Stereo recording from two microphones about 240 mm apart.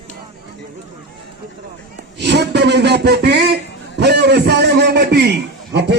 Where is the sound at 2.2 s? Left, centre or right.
Right.